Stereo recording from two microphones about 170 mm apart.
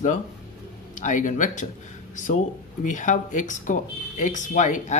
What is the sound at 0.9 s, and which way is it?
Speech, 50° left (ahead or behind).